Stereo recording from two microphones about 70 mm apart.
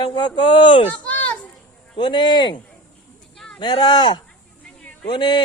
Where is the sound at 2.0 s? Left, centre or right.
Left.